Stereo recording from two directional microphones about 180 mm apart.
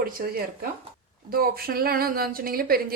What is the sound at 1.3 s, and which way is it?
A woman's voice, 55° right (ahead or behind).